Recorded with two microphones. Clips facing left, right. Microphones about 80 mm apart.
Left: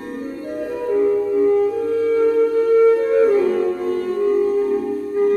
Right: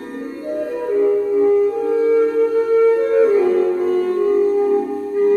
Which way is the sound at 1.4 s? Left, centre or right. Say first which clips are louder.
Right 2 dB; centre.